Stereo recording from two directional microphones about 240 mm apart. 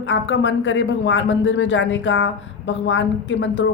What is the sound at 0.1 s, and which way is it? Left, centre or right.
Speech, left.